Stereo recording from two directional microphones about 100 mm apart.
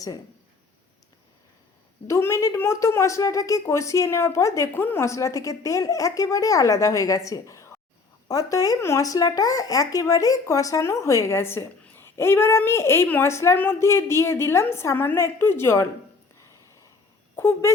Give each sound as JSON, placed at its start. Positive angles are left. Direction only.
{"t": 2.0, "sound": "a woman's voice", "side_deg": 30}
{"t": 17.3, "sound": "speech", "side_deg": 25}